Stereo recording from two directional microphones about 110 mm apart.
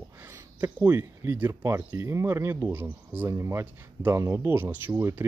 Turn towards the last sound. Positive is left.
turn(degrees=-15)  # may be behind; listen again after turning